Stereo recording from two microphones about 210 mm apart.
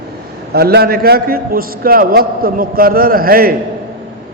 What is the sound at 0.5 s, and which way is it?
A man's voice, 50° right (ahead or behind).